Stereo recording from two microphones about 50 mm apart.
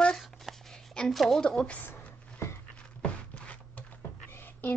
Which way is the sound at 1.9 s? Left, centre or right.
Left.